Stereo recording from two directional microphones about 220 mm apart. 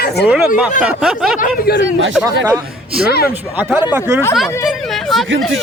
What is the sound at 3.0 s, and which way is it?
Speech, 45° left (ahead or behind).